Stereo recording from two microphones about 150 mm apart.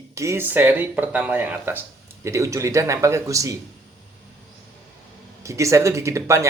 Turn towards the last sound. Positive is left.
turn(degrees=-20)  # may be behind; listen again after turning